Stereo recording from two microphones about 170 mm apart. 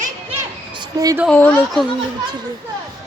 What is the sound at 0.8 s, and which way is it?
Speech, 20° right (ahead or behind).